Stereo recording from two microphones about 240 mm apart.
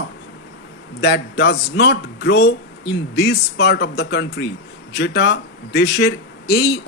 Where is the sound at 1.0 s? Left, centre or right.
Left.